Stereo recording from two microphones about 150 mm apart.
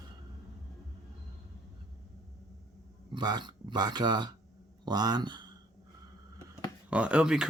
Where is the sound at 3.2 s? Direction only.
30° right (ahead or behind).